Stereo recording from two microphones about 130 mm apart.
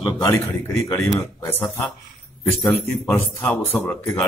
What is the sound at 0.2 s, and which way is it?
A man's voice, 20° left (ahead or behind).